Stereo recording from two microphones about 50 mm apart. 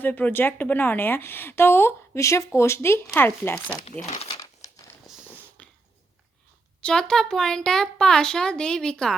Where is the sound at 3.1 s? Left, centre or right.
Left.